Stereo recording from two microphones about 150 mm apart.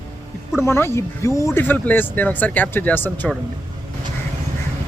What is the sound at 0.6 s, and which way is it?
Speech, 15° left (ahead or behind).